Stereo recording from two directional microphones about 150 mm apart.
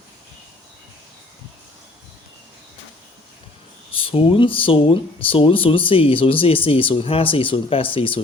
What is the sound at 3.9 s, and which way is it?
Speech, 40° left (ahead or behind).